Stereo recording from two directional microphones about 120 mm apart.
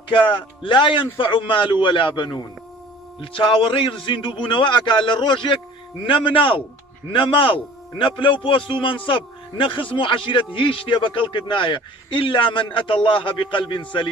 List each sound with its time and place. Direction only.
0.2 s a man's voice: 45° left (ahead or behind)